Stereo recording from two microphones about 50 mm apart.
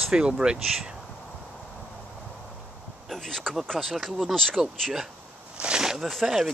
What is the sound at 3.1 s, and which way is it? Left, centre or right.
Speech, centre.